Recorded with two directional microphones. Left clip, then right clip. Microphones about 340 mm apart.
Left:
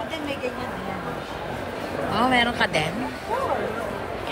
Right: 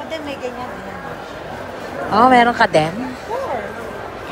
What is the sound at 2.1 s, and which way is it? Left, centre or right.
Speech, centre.